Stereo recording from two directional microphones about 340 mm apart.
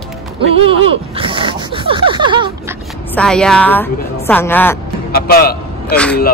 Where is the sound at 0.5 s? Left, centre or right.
Centre.